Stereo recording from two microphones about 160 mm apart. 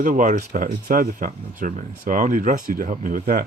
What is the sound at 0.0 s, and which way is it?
Speech, 55° right (ahead or behind).